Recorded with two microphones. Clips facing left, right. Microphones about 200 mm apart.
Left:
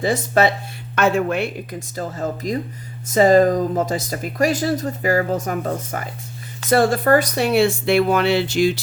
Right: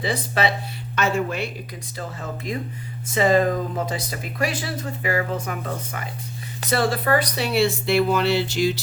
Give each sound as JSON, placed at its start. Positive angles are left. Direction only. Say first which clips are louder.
{"t": 0.0, "sound": "speech", "louder": "left 6 dB", "side_deg": 45}
{"t": 0.9, "sound": "speech", "louder": "left 5 dB", "side_deg": 55}
{"t": 2.0, "sound": "speech", "louder": "left 7 dB", "side_deg": 40}